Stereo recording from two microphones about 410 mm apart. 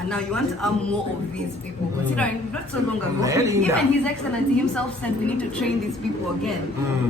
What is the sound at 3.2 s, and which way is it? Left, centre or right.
Speech, centre.